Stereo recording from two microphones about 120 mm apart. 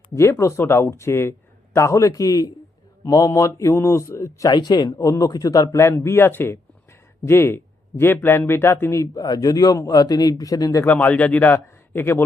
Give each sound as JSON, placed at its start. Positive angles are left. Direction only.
{"t": 0.1, "sound": "a man's voice", "side_deg": 25}
{"t": 10.8, "sound": "speech", "side_deg": 10}